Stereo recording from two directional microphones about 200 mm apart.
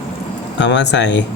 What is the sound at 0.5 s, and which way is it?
Speech, 60° left (ahead or behind).